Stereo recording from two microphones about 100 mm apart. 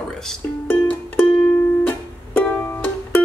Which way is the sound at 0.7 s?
20° left (ahead or behind).